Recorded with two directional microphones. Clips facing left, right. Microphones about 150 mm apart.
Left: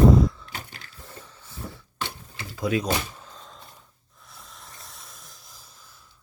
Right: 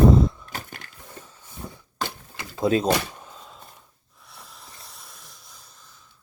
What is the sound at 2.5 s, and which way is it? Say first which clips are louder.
Speech: right 4 dB; 25° right (ahead or behind).